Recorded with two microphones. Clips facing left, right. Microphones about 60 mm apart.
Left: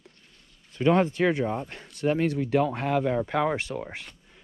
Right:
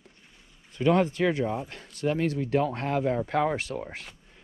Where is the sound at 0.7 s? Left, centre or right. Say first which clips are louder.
Left 1 dB; left.